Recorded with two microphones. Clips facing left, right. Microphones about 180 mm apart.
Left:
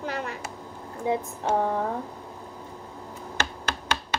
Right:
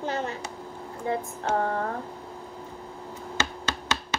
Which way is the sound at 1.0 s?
10° left (ahead or behind).